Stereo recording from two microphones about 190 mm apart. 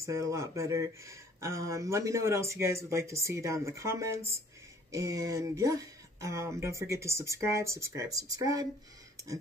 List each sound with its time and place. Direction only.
0.0 s speech: 15° right (ahead or behind)